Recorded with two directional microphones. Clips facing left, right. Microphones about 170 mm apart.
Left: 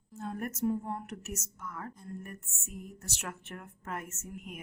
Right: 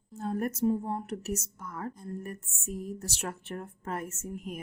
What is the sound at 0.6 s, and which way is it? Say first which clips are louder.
A woman's voice: right 1 dB; 25° right (ahead or behind).